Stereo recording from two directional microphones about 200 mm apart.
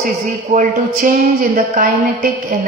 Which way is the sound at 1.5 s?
45° right (ahead or behind).